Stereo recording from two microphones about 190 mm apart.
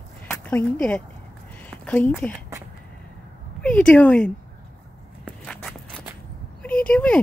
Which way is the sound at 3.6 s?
5° left (ahead or behind).